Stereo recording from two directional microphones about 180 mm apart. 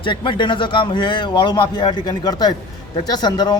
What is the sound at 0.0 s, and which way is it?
Speech, 25° left (ahead or behind).